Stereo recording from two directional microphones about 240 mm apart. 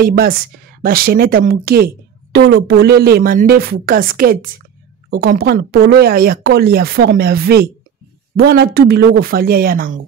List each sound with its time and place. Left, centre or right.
0.0 s speech: right